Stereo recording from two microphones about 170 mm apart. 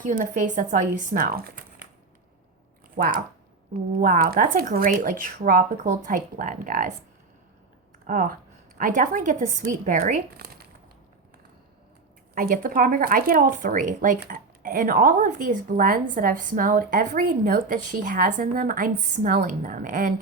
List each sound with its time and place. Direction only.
0.0 s speech: 50° right (ahead or behind)
2.9 s speech: 50° right (ahead or behind)
8.0 s speech: 50° right (ahead or behind)
12.3 s speech: 55° right (ahead or behind)